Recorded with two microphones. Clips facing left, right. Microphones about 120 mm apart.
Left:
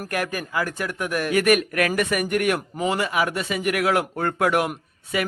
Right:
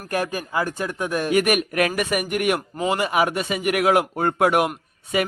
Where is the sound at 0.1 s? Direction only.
25° right (ahead or behind).